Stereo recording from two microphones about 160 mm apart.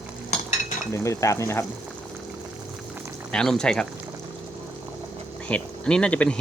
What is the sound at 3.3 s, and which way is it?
Speech, 5° left (ahead or behind).